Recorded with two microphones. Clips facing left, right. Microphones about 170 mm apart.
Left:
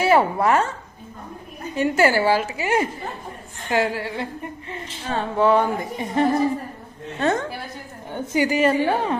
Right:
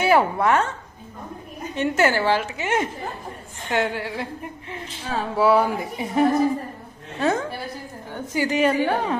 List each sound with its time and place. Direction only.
0.0 s a woman's voice: centre (ahead or behind)
1.7 s speech: 5° left (ahead or behind)
8.1 s a woman's voice: 20° left (ahead or behind)
8.4 s speech: centre (ahead or behind)